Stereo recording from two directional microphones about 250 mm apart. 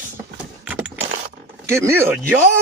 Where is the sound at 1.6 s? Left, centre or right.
Centre.